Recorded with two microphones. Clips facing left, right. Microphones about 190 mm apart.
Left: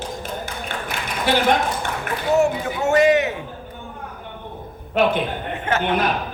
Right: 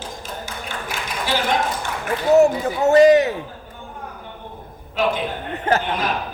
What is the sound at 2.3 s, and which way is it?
Speech, 35° right (ahead or behind).